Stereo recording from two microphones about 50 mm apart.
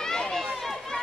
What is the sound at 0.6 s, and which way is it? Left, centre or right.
Run, centre.